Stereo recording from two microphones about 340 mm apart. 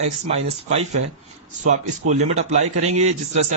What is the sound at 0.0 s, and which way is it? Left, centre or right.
A man's voice, centre.